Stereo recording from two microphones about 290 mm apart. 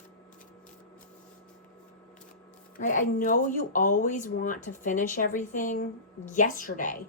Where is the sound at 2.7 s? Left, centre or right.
Left.